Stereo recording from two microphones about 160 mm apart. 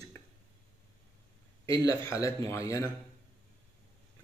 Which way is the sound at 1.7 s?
20° left (ahead or behind).